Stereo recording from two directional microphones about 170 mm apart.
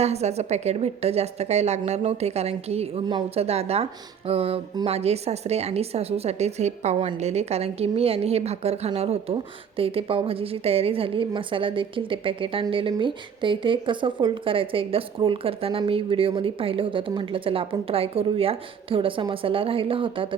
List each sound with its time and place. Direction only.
0.0 s a woman's voice: 40° right (ahead or behind)